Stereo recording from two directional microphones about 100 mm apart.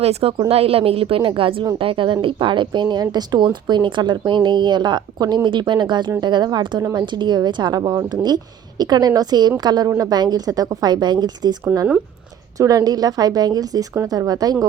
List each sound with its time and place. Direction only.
0.0 s a woman's voice: 80° right; by 11.5 s 45° right (ahead or behind)
12.5 s a woman's voice: 35° right (ahead or behind)